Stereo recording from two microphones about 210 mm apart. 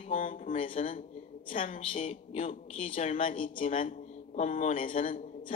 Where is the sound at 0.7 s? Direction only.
40° left (ahead or behind).